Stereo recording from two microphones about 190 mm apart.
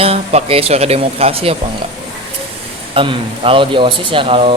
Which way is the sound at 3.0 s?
30° right (ahead or behind).